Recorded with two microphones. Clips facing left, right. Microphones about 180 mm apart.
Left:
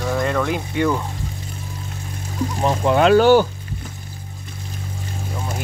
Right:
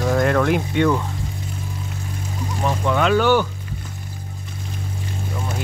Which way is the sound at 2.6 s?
30° left (ahead or behind).